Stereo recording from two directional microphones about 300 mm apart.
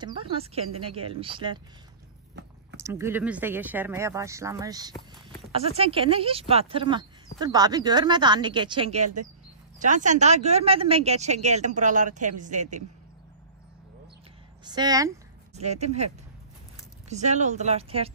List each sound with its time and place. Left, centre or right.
0.0 s speech: centre
2.8 s speech: centre; by 12.8 s right
14.6 s a sound: centre
15.6 s speech: right
17.1 s speech: right